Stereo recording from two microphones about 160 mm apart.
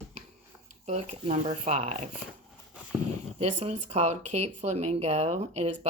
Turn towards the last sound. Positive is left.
turn(degrees=-45)  # may be behind; listen again after turning